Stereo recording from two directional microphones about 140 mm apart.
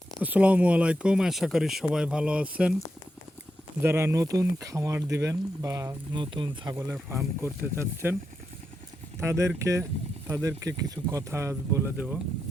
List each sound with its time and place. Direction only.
0.2 s speech: 10° right (ahead or behind)
3.8 s speech: 20° right (ahead or behind)
7.4 s speech: 15° right (ahead or behind)
9.2 s speech: 20° right (ahead or behind)